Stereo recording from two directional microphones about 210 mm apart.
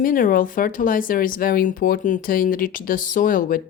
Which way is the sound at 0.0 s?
40° left (ahead or behind).